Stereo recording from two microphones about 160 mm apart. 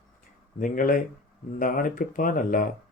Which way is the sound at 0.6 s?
55° left (ahead or behind).